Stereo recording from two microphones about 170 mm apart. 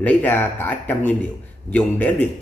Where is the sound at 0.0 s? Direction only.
10° left (ahead or behind).